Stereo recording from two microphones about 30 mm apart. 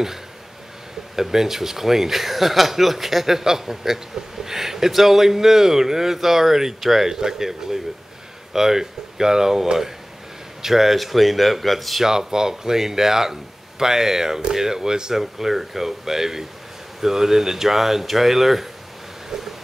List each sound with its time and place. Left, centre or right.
1.1 s speech: centre
7.1 s speech: centre
12.0 s speech: centre